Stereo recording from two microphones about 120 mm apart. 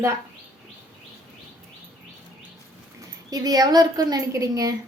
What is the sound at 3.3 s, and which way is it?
A woman's voice, 30° right (ahead or behind).